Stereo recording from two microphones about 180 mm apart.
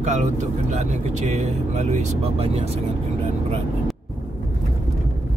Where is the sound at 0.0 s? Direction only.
40° right (ahead or behind).